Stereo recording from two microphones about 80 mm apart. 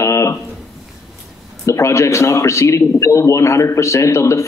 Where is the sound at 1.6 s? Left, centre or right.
Left.